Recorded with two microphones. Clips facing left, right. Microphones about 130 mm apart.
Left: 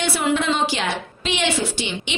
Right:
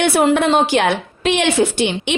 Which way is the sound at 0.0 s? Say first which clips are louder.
Right 7 dB; 55° right (ahead or behind).